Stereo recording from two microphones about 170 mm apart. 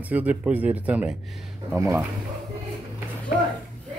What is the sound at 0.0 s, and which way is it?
Speech, 10° right (ahead or behind).